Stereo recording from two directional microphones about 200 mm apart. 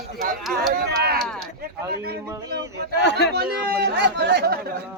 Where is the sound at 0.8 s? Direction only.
55° right (ahead or behind).